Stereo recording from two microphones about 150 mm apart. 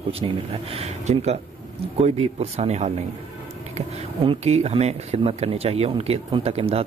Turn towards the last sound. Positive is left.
turn(degrees=-40)  # may be behind; listen again after turning